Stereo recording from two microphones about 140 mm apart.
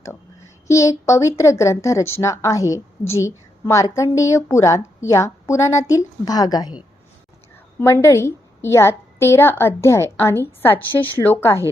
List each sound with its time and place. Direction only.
0.7 s speech: 20° left (ahead or behind)
7.8 s speech: 20° left (ahead or behind)